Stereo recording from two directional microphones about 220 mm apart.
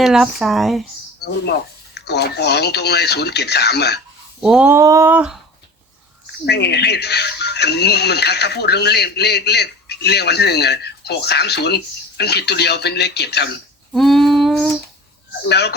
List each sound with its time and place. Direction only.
0.0 s female singing: centre (ahead or behind)
2.0 s speech: 50° left (ahead or behind)
4.4 s a sound: 5° right (ahead or behind)
6.4 s speech: 50° left (ahead or behind)
13.9 s female singing: centre (ahead or behind)
15.4 s speech: 50° left (ahead or behind)